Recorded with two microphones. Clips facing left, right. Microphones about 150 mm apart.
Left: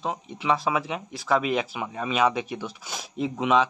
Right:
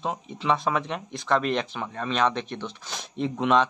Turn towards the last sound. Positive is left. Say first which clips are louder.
# even
turn(degrees=5)  # may be behind; listen again after turning